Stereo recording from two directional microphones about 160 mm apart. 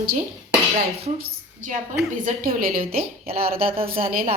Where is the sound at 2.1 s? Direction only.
55° right (ahead or behind).